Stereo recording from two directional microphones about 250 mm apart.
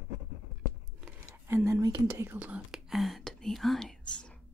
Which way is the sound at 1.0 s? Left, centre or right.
Centre.